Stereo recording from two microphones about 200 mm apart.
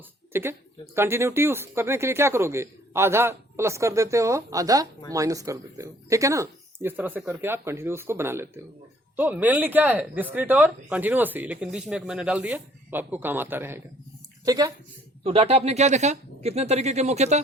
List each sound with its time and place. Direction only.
0.3 s a woman's voice: 10° right (ahead or behind)
15.2 s speech: 30° right (ahead or behind)